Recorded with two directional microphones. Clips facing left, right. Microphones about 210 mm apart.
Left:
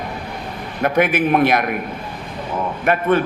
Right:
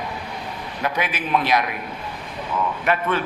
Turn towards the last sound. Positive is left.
turn(degrees=50)  # may be behind; listen again after turning